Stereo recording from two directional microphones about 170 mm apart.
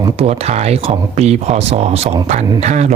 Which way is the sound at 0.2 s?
35° right (ahead or behind).